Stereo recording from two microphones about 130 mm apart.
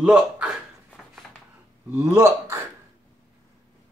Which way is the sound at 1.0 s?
5° right (ahead or behind).